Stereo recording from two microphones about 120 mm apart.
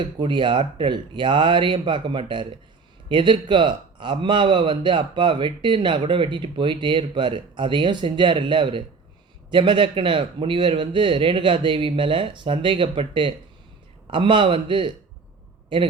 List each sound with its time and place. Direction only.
0.0 s a man's voice: 40° right (ahead or behind)